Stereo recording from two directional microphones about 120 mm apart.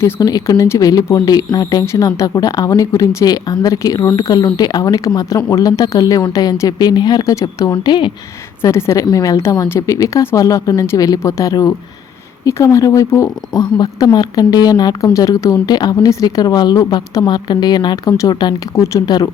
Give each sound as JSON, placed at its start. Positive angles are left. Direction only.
{"t": 0.0, "sound": "a woman's voice", "side_deg": 30}
{"t": 8.6, "sound": "a woman's voice", "side_deg": 25}